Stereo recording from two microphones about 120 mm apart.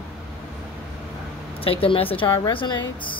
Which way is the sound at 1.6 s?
50° left (ahead or behind).